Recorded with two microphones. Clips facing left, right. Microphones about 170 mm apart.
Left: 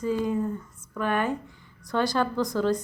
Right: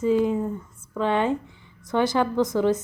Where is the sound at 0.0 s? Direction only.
20° right (ahead or behind).